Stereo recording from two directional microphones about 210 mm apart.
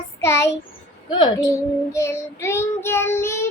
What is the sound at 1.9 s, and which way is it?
Child singing, 15° left (ahead or behind).